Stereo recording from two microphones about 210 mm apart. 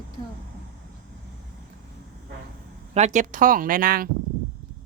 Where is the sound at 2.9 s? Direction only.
35° right (ahead or behind).